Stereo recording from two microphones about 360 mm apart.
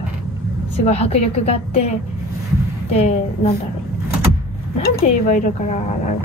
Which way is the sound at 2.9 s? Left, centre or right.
Centre.